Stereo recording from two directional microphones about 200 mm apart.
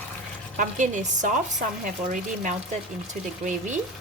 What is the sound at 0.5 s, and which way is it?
Speech, 40° right (ahead or behind).